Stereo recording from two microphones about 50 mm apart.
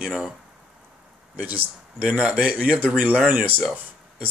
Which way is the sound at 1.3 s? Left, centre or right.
Right.